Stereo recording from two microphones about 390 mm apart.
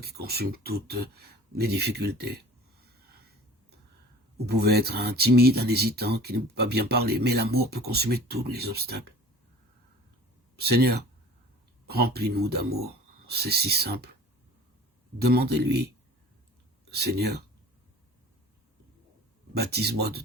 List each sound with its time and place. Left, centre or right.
0.0 s speech: right
4.4 s speech: right
10.6 s speech: right
15.2 s speech: right
16.9 s speech: right
19.5 s speech: right